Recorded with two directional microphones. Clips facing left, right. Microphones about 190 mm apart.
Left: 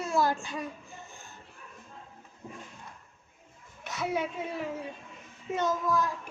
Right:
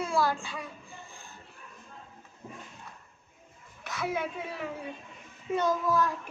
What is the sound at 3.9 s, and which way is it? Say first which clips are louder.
Speech: left 1 dB; 25° left (ahead or behind).